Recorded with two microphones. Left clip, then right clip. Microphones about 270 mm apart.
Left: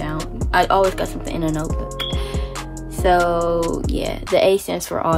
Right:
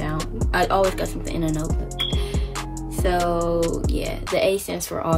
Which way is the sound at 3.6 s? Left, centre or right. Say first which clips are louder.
Left 2 dB; centre.